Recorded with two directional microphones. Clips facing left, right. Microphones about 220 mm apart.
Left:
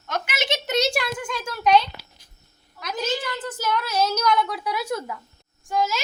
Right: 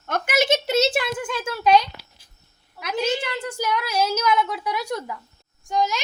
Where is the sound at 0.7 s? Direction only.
5° right (ahead or behind).